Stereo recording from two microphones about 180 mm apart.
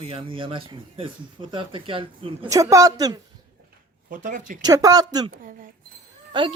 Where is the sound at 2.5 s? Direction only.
20° right (ahead or behind).